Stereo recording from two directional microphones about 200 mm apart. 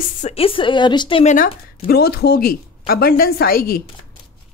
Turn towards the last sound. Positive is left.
turn(degrees=50)  # may be behind; listen again after turning